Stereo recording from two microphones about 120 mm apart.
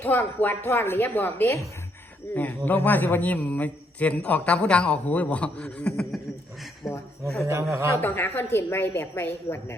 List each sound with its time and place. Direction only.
0.0 s a man's voice: 15° left (ahead or behind); by 7.0 s centre (ahead or behind)
7.4 s speech: 25° right (ahead or behind)
8.0 s a man's voice: 15° left (ahead or behind)